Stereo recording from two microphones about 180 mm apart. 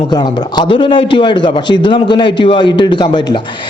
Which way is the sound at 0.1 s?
25° left (ahead or behind).